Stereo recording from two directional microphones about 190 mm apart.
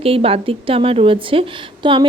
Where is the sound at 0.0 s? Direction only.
30° right (ahead or behind).